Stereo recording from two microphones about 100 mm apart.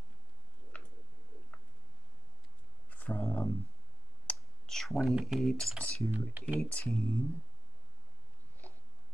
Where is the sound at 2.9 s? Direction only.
15° left (ahead or behind).